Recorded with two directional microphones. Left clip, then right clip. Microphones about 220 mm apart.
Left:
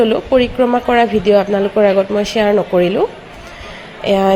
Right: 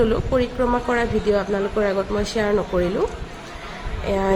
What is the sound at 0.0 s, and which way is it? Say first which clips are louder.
A woman's voice: left 7 dB; 20° left (ahead or behind).